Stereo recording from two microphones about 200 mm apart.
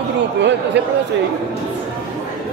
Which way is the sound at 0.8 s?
60° right (ahead or behind).